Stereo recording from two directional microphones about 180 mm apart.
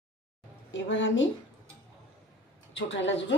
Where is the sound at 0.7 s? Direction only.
90° left.